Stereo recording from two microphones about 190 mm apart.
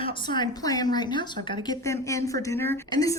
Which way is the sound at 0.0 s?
25° left (ahead or behind).